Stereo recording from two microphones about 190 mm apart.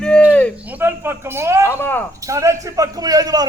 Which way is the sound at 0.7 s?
10° right (ahead or behind).